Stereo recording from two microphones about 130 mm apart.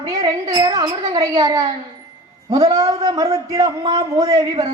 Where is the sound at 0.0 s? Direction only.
25° right (ahead or behind).